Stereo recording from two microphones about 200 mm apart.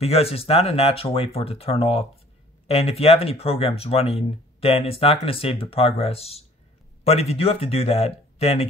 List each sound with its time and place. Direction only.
0.0 s speech: 30° left (ahead or behind)